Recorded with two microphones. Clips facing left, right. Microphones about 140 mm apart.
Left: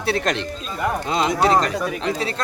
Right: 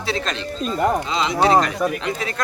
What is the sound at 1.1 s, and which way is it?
Speech, 50° left (ahead or behind).